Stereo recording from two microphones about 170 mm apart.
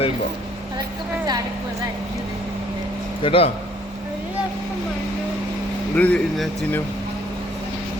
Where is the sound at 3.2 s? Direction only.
35° left (ahead or behind).